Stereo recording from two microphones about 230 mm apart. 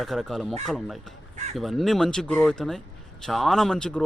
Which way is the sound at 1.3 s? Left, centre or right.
Right.